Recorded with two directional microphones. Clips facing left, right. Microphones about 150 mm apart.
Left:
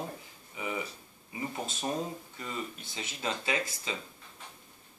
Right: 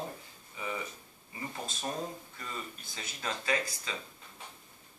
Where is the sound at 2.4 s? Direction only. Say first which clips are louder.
Left 4 dB; 25° left (ahead or behind).